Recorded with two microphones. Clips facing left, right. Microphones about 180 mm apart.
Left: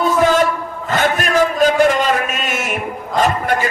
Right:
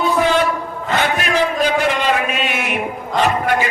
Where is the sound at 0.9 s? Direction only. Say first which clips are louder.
Left 2 dB; 45° left (ahead or behind).